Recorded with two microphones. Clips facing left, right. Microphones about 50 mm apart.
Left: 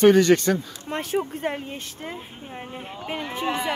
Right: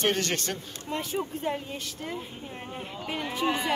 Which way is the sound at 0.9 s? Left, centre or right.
Left.